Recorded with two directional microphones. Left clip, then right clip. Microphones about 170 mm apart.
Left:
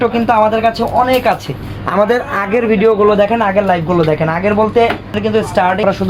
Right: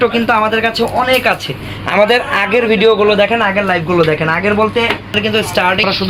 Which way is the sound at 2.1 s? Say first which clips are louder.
Right 2 dB; 15° left (ahead or behind).